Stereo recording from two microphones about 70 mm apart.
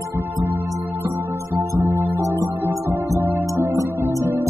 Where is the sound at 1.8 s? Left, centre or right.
Right.